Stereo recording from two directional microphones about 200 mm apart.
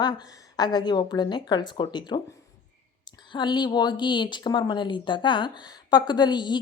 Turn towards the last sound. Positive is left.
turn(degrees=20)  # may be behind; listen again after turning